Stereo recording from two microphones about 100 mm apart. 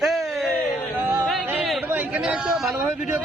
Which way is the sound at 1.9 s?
10° right (ahead or behind).